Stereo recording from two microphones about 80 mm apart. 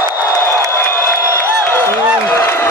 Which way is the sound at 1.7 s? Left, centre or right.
Left.